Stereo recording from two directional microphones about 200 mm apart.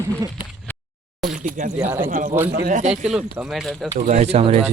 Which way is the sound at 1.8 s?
10° right (ahead or behind).